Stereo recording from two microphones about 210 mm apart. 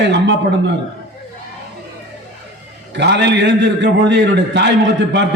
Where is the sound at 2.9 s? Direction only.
55° right (ahead or behind).